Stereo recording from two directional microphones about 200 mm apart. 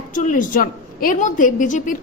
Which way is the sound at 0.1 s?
40° left (ahead or behind).